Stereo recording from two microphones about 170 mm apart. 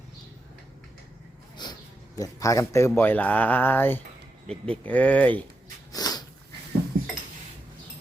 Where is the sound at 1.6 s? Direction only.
25° left (ahead or behind).